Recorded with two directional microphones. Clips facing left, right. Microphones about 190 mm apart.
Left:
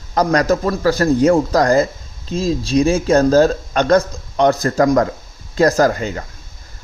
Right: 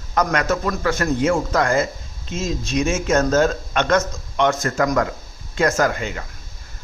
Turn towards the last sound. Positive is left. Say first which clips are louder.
# left 5 dB
turn(degrees=35)  # may be behind; listen again after turning